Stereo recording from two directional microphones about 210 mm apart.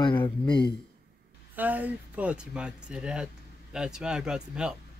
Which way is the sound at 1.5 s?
10° right (ahead or behind).